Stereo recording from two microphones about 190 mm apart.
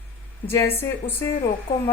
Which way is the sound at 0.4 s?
15° left (ahead or behind).